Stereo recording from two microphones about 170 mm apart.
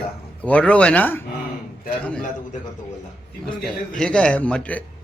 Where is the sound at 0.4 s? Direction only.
5° left (ahead or behind).